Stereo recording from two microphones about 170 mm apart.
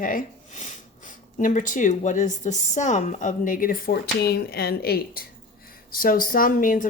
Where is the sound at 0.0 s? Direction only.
55° left (ahead or behind).